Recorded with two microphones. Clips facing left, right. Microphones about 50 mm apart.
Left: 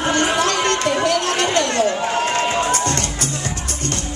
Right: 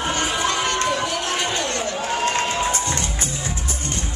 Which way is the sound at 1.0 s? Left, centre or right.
Left.